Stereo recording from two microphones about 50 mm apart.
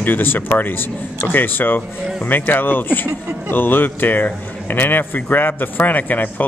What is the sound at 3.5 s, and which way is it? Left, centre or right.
A man's voice, left.